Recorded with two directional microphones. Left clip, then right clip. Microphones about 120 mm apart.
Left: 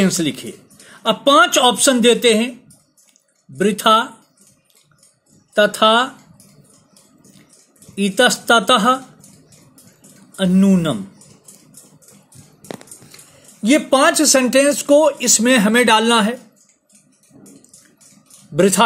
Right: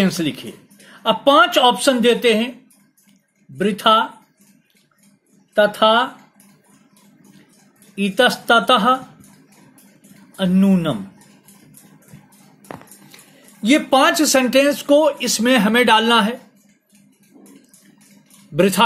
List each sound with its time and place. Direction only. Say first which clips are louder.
0.0 s speech: left 2 dB; 80° left
3.5 s speech: left 1 dB; 90° left
5.5 s speech: left 1 dB; 90° left
7.9 s speech: left 1 dB; 85° left
10.3 s speech: left 2 dB; 85° left
13.1 s speech: left 1 dB; 40° left (ahead or behind); by 16.3 s 55° left (ahead or behind)
18.6 s speech: left 1 dB; 50° left (ahead or behind)